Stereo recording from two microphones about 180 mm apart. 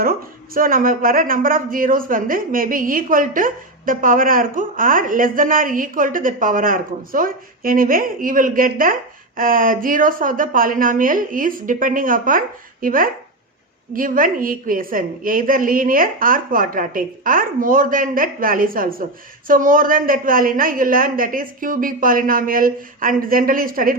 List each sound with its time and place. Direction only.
0.0 s a woman's voice: 55° right (ahead or behind)